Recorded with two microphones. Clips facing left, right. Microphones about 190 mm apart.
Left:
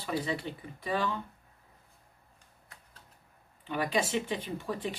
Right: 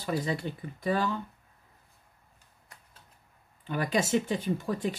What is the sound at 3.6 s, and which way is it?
Speech, 40° right (ahead or behind).